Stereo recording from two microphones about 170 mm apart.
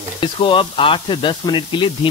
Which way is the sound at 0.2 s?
30° left (ahead or behind).